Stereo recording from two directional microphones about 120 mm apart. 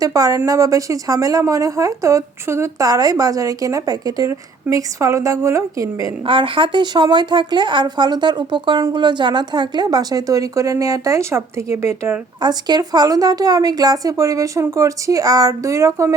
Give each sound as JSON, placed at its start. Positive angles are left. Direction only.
{"t": 0.0, "sound": "a woman's voice", "side_deg": -30}
{"t": 6.2, "sound": "a woman's voice", "side_deg": -45}
{"t": 12.4, "sound": "a woman's voice", "side_deg": -35}